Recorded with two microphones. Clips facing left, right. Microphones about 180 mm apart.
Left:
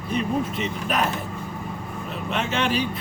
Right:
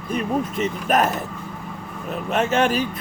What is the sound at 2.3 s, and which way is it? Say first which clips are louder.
Speech: right 5 dB; 45° right (ahead or behind).